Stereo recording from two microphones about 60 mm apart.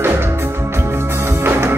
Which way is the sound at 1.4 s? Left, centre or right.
Right.